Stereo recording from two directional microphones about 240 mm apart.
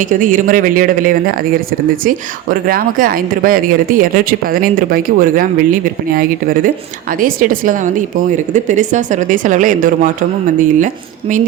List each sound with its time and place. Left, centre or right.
0.0 s a woman's voice: right